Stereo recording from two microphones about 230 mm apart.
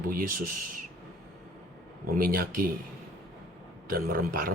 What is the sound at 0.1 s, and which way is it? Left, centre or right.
Speech, right.